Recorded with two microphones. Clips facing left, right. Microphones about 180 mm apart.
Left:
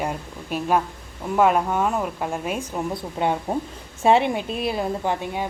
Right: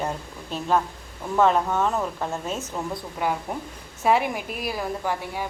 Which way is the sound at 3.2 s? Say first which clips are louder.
Left 4 dB; 25° left (ahead or behind).